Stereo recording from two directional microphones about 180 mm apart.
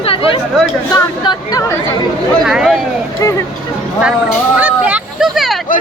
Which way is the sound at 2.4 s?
5° right (ahead or behind).